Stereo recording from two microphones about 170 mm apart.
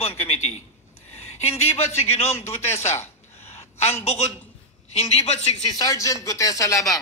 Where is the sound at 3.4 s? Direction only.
40° left (ahead or behind).